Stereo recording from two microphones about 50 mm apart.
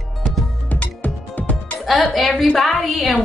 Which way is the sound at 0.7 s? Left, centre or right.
Left.